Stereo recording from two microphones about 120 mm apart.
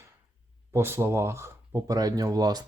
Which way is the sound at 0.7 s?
20° right (ahead or behind).